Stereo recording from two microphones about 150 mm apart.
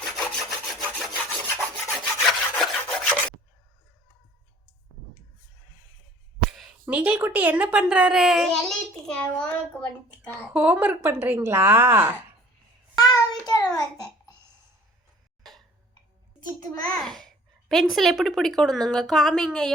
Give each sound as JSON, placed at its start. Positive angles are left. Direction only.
{"t": 0.0, "sound": "rub", "side_deg": 0}
{"t": 1.5, "sound": "filing", "side_deg": 10}
{"t": 2.2, "sound": "rub", "side_deg": 5}
{"t": 6.8, "sound": "a child's voice", "side_deg": -10}
{"t": 10.5, "sound": "a child's voice", "side_deg": -10}
{"t": 13.0, "sound": "child singing", "side_deg": 25}
{"t": 13.7, "sound": "a sound", "side_deg": 25}
{"t": 16.5, "sound": "a child's voice", "side_deg": 5}